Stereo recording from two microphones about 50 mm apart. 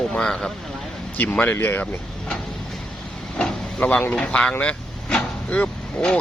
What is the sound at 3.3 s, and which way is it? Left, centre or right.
Vehicle, left.